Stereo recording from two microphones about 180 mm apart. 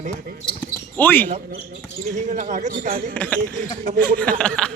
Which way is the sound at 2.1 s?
40° right (ahead or behind).